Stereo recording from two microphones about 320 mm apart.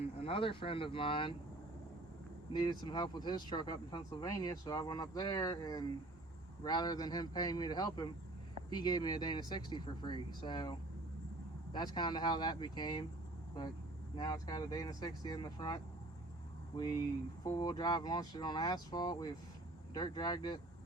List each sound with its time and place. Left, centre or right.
0.2 s speech: centre
2.5 s speech: centre
14.2 s speech: centre
17.4 s speech: centre